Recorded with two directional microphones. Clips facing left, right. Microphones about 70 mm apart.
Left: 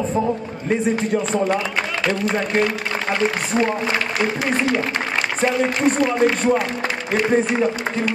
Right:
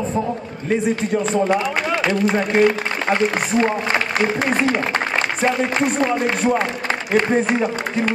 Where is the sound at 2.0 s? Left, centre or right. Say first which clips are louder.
Right 1 dB; centre.